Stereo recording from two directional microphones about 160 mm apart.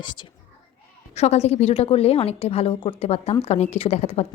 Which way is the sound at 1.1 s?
40° left (ahead or behind).